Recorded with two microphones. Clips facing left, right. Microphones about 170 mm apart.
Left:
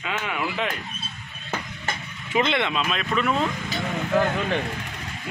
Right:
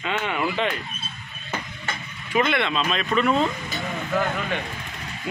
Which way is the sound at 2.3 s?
20° left (ahead or behind).